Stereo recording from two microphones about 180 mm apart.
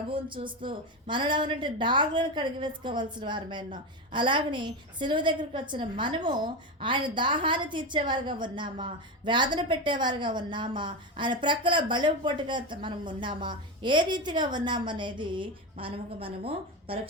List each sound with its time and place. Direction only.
0.1 s a woman's voice: 30° right (ahead or behind)